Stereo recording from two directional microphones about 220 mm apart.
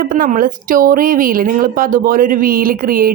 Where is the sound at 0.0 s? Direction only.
40° right (ahead or behind).